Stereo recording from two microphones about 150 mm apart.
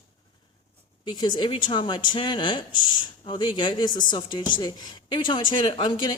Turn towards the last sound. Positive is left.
turn(degrees=30)  # may be behind; listen again after turning